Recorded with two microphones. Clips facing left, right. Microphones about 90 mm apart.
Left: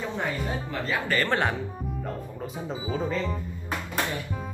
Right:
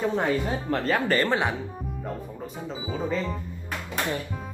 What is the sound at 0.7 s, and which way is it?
Speech, 50° right (ahead or behind).